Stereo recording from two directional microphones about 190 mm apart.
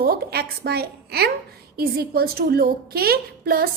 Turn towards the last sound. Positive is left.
turn(degrees=-55)  # may be behind; listen again after turning